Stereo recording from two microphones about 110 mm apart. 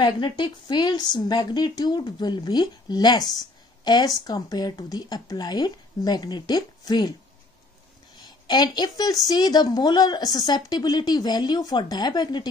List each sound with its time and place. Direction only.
0.0 s a woman's voice: 45° left (ahead or behind)
8.2 s a woman's voice: 40° left (ahead or behind)